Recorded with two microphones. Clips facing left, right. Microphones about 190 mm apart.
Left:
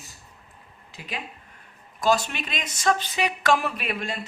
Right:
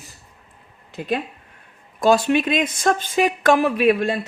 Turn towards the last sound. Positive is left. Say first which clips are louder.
# right 13 dB
turn(degrees=-60)  # may be behind; listen again after turning